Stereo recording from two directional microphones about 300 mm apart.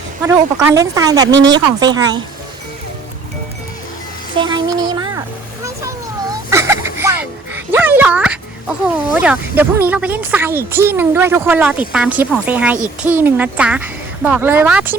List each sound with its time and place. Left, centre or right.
0.2 s speech: centre
1.3 s speech: right
1.5 s speech: centre
4.4 s a sound: centre
6.5 s music: centre
9.1 s speech: centre